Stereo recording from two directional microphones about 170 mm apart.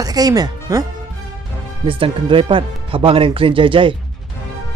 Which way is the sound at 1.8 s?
30° right (ahead or behind).